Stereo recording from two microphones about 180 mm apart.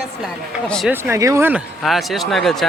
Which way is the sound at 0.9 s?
15° right (ahead or behind).